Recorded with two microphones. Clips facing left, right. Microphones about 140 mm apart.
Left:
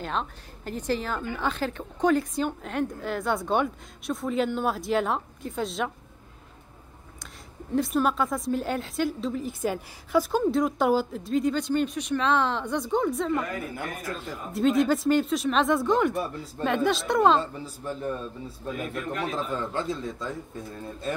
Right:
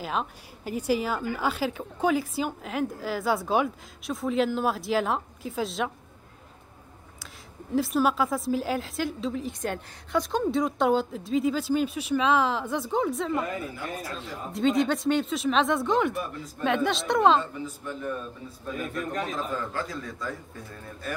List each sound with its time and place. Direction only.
0.0 s a woman's voice: 5° right (ahead or behind)
7.7 s a woman's voice: centre (ahead or behind)
13.3 s a woman's voice: 20° right (ahead or behind)
14.1 s a woman's voice: centre (ahead or behind)
17.4 s a man's voice: 35° left (ahead or behind)
19.3 s a man's voice: 25° left (ahead or behind)